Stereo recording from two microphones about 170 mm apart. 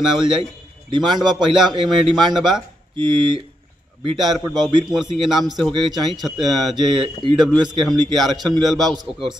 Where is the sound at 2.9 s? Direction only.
30° right (ahead or behind).